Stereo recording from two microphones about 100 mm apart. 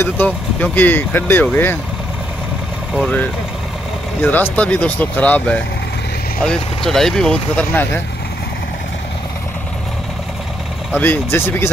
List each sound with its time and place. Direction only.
0.0 s speech: 20° left (ahead or behind)
4.2 s speech: 20° left (ahead or behind)
10.9 s speech: 20° left (ahead or behind)